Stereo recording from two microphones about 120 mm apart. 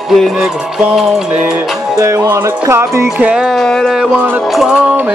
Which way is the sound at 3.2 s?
5° right (ahead or behind).